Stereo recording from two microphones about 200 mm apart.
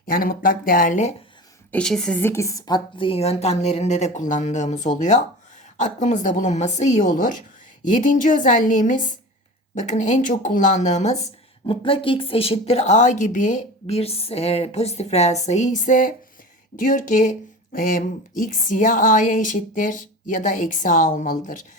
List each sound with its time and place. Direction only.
0.0 s speech: 45° left (ahead or behind)
1.7 s speech: 5° left (ahead or behind); by 21.6 s 40° left (ahead or behind)